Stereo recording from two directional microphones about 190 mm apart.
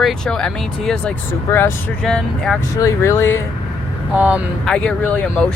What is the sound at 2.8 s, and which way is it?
Speech, 15° left (ahead or behind).